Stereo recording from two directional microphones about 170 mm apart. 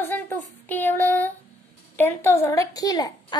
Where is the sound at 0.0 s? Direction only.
10° left (ahead or behind).